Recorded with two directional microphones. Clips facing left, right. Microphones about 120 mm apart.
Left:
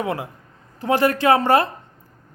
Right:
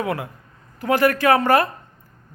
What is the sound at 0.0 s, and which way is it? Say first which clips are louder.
A man's voice: even; 25° left (ahead or behind).